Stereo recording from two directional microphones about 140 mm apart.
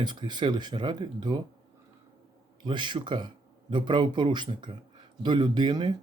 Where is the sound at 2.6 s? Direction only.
35° right (ahead or behind).